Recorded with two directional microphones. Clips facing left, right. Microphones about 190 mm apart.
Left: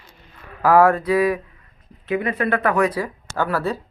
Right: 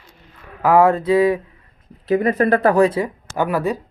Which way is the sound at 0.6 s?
20° right (ahead or behind).